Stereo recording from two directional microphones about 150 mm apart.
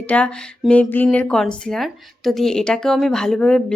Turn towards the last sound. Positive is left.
turn(degrees=5)  # may be behind; listen again after turning